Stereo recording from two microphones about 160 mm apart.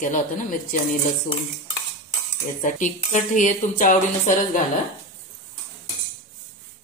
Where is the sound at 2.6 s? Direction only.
55° left (ahead or behind).